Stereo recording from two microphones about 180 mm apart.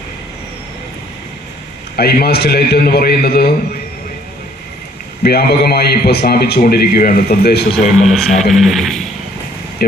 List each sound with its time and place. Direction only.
2.0 s a man's voice: 60° left (ahead or behind)
5.2 s a man's voice: 60° left (ahead or behind)
7.9 s a man's voice: centre (ahead or behind)